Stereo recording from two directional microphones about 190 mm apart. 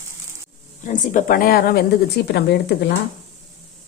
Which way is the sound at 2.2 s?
60° left (ahead or behind).